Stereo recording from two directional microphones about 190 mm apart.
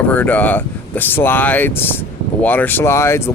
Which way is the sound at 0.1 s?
10° left (ahead or behind).